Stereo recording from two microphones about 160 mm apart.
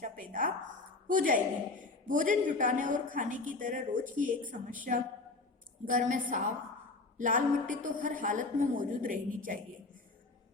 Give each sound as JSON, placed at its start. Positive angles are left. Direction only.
{"t": 0.0, "sound": "a sound", "side_deg": -55}
{"t": 1.1, "sound": "a woman's voice", "side_deg": -55}
{"t": 5.8, "sound": "a woman's voice", "side_deg": -55}